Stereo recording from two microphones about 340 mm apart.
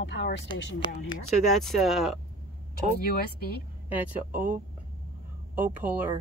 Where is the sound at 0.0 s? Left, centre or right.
Left.